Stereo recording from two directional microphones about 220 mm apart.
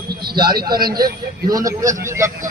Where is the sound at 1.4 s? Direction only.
15° right (ahead or behind).